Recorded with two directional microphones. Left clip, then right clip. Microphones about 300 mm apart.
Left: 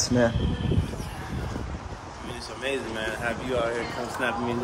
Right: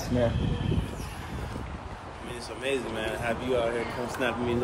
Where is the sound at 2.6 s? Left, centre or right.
Centre.